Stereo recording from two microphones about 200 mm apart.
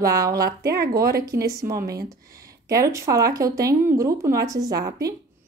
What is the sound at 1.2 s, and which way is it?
A woman's voice, 15° right (ahead or behind).